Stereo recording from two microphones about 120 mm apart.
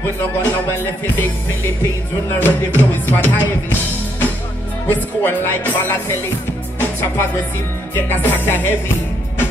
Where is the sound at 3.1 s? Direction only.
15° left (ahead or behind).